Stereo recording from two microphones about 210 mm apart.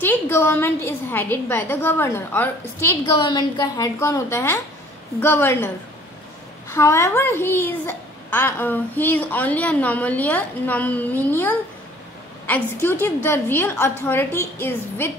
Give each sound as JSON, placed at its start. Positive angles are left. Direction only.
{"t": 0.0, "sound": "a woman's voice", "side_deg": 10}
{"t": 3.2, "sound": "a woman's voice", "side_deg": 20}
{"t": 6.7, "sound": "a woman's voice", "side_deg": 10}